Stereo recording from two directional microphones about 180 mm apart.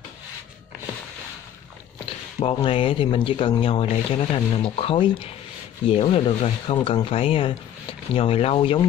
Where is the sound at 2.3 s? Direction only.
30° left (ahead or behind).